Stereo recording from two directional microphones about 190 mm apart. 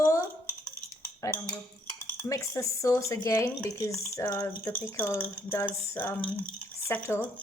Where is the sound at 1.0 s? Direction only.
10° left (ahead or behind).